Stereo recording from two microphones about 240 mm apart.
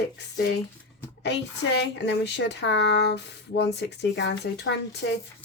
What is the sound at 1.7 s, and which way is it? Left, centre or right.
Speech, left.